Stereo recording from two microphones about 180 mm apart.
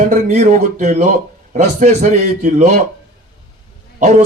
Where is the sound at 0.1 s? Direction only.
40° right (ahead or behind).